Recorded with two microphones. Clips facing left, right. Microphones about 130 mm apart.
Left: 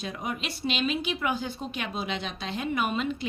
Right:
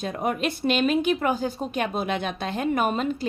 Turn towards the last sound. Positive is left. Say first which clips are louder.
# right 4 dB
turn(degrees=-40)  # may be behind; listen again after turning